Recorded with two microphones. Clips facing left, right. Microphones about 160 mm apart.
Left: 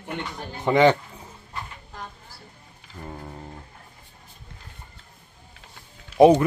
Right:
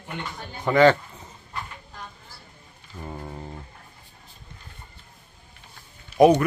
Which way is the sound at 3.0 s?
5° right (ahead or behind).